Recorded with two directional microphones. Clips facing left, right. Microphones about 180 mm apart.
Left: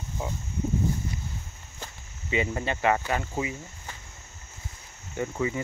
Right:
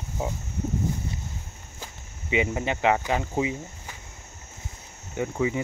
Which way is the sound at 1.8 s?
15° right (ahead or behind).